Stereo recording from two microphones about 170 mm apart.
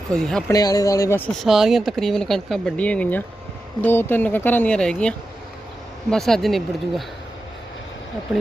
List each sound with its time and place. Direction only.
0.1 s speech: 5° left (ahead or behind)
0.5 s speech: 20° left (ahead or behind)
1.3 s speech: centre (ahead or behind)